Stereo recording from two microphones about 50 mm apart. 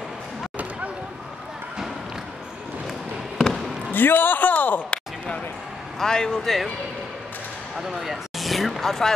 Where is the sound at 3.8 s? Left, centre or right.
Left.